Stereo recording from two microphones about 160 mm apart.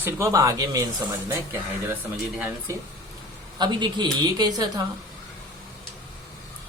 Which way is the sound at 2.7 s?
20° right (ahead or behind).